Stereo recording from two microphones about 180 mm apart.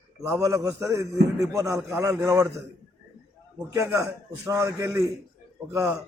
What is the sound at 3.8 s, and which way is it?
A man's voice, 15° right (ahead or behind).